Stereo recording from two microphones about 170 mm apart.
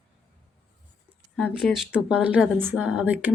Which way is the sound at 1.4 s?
Centre (ahead or behind).